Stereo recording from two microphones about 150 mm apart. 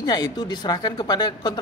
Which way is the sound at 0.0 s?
25° left (ahead or behind).